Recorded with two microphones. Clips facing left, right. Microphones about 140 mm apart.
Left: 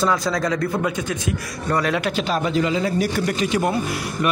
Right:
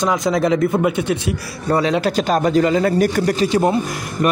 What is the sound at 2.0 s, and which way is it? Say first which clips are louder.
Speech: right 5 dB; 45° right (ahead or behind).